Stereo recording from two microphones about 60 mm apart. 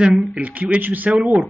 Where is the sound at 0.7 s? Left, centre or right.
Right.